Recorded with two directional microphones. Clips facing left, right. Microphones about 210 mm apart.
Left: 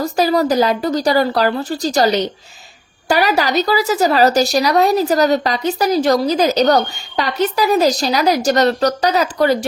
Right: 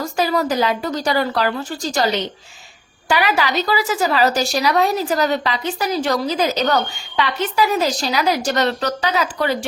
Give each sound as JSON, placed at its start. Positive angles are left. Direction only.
{"t": 0.0, "sound": "speech", "side_deg": 35}